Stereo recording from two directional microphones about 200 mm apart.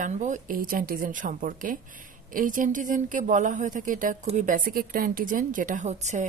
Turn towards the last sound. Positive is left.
turn(degrees=-35)  # may be behind; listen again after turning